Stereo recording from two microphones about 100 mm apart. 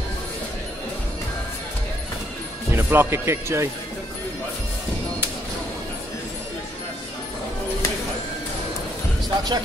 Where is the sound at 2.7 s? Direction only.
25° right (ahead or behind).